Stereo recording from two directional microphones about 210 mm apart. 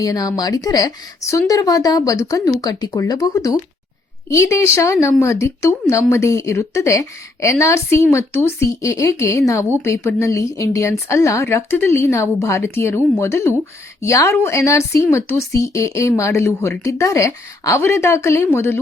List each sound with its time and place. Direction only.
0.0 s speech: 15° left (ahead or behind)